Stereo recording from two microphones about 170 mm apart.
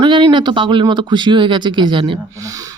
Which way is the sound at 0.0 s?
30° right (ahead or behind).